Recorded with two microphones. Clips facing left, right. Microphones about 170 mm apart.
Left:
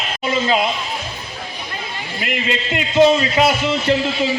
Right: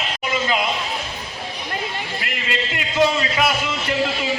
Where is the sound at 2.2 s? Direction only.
20° left (ahead or behind).